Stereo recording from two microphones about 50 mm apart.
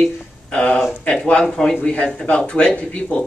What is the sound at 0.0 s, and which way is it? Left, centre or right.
Speech, left.